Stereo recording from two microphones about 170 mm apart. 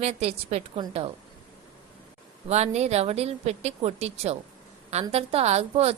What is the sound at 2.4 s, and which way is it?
A woman's voice, 40° right (ahead or behind).